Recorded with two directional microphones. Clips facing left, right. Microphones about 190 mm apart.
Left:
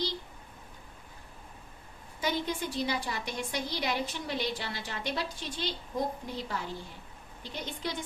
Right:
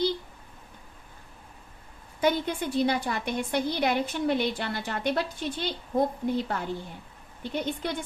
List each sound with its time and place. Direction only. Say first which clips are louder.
2.2 s a woman's voice: right 6 dB; 55° right (ahead or behind)